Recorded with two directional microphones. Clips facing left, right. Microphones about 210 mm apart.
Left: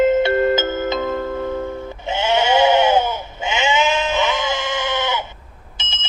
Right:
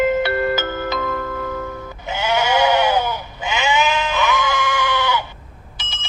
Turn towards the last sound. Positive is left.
turn(degrees=25)  # may be behind; listen again after turning